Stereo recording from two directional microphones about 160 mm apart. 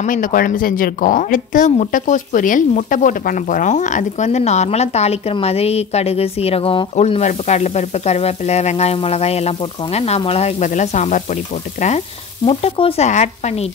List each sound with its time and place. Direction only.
0.0 s speech: 55° left (ahead or behind)
12.4 s speech: 35° left (ahead or behind)